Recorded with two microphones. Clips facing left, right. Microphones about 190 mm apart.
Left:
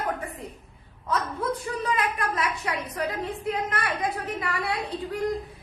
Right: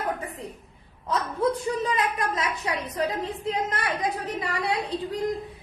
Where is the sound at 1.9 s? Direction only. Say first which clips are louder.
Right 1 dB; 25° right (ahead or behind).